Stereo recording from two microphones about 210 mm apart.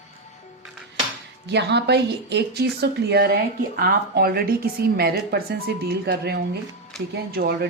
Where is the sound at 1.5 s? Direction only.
55° right (ahead or behind).